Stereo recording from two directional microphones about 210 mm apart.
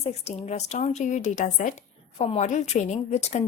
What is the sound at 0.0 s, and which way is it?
A woman's voice, 30° left (ahead or behind).